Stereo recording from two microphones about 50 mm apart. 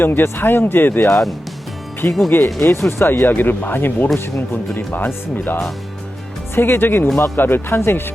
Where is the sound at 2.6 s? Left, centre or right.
Left.